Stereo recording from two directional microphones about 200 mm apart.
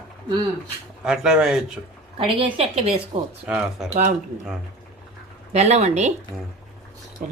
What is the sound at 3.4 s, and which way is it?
Speech, 5° right (ahead or behind).